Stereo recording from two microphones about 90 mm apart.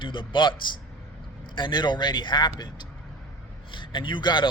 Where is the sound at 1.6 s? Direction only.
60° left (ahead or behind).